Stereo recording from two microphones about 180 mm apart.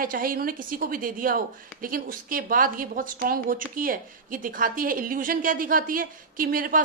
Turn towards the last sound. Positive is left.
turn(degrees=-50)  # may be behind; listen again after turning